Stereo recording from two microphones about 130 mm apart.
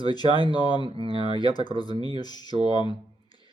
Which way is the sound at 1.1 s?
35° left (ahead or behind).